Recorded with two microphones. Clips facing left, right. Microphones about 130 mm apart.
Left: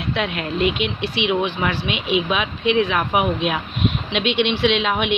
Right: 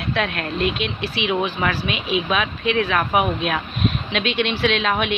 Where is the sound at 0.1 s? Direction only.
15° left (ahead or behind).